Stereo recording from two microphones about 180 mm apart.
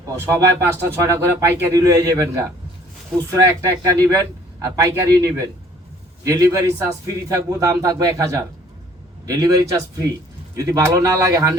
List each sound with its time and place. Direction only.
0.7 s a man's voice: 15° right (ahead or behind)